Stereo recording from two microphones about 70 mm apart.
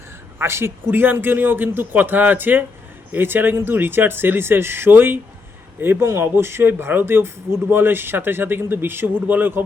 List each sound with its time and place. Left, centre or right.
0.3 s a man's voice: right